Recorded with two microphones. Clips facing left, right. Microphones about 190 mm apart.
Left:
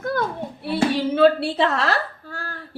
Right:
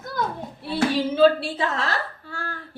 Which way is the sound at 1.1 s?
65° left (ahead or behind).